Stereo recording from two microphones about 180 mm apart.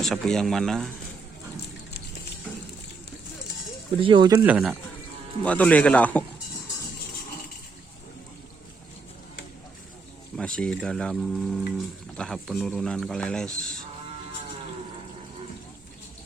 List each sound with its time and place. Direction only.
0.0 s speech: 5° left (ahead or behind)
4.0 s speech: 25° right (ahead or behind)
4.4 s speech: 5° right (ahead or behind)
5.5 s a man's voice: 5° left (ahead or behind)
10.3 s speech: 5° left (ahead or behind)